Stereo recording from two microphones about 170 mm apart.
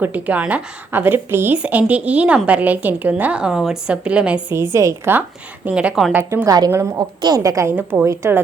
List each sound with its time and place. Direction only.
0.0 s a woman's voice: 10° right (ahead or behind)
6.3 s speech: 20° right (ahead or behind)